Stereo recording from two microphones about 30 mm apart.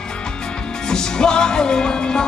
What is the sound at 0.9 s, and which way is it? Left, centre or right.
Music, left.